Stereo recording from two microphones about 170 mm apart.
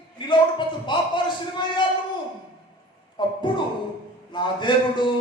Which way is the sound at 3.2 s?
30° left (ahead or behind).